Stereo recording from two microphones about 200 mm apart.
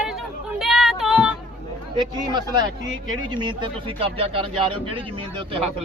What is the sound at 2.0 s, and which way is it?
A man's voice, 25° right (ahead or behind).